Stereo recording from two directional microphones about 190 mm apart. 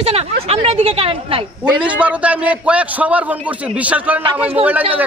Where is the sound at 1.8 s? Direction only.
5° right (ahead or behind).